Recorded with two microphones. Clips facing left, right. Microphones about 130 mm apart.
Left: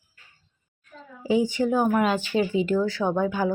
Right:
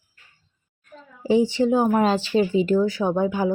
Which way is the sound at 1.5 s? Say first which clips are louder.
Right 3 dB; 25° right (ahead or behind).